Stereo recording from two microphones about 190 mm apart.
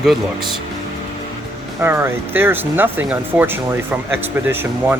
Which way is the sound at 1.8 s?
10° right (ahead or behind).